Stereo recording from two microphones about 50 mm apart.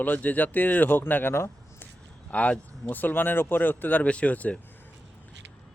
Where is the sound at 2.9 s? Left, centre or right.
Left.